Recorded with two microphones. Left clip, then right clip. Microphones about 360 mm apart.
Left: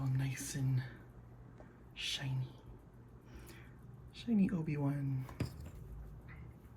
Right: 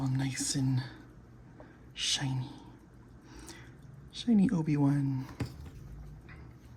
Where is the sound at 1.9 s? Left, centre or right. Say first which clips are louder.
Right 8 dB; centre.